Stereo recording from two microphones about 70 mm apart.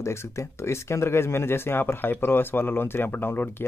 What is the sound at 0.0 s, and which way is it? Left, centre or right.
Speech, left.